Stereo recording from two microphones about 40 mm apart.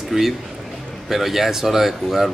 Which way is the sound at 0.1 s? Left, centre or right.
Centre.